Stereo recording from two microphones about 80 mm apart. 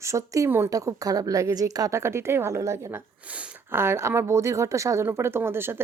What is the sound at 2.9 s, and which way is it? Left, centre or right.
Speech, centre.